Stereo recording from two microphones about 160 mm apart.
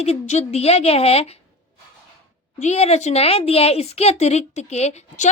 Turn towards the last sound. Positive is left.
turn(degrees=45)  # may be behind; listen again after turning